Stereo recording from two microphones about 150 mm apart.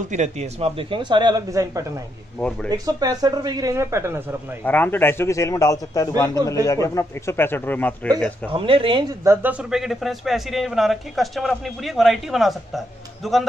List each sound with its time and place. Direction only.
0.1 s speech: 50° right (ahead or behind); by 1.9 s 20° right (ahead or behind)
2.3 s a man's voice: 10° left (ahead or behind)
2.7 s a man's voice: 25° right (ahead or behind)
4.6 s a man's voice: 10° left (ahead or behind)
8.5 s speech: 35° right (ahead or behind)
9.2 s a man's voice: 15° right (ahead or behind); by 13.5 s centre (ahead or behind)